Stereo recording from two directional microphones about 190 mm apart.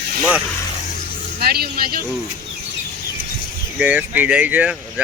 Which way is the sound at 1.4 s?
55° right (ahead or behind).